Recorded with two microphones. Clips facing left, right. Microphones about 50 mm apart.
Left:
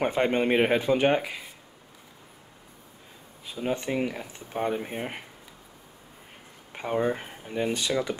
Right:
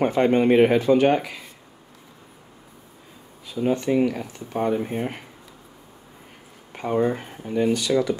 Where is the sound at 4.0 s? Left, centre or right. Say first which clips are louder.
Right 7 dB; centre.